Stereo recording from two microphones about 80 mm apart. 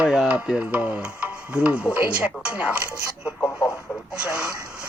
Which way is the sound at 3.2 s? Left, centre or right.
Left.